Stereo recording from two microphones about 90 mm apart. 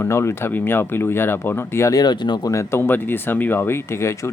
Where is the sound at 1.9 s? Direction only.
50° left (ahead or behind).